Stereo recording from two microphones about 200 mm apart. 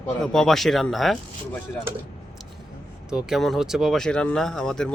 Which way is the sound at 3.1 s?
5° right (ahead or behind).